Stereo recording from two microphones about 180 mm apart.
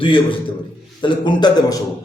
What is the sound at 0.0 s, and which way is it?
A man's voice, 30° left (ahead or behind).